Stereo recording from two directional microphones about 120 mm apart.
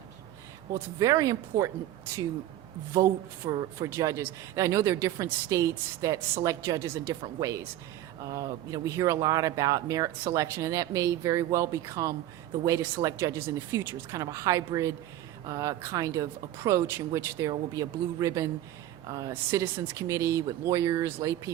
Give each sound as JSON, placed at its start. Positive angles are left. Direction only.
{"t": 0.7, "sound": "speech", "side_deg": -25}
{"t": 2.9, "sound": "a woman's voice", "side_deg": -25}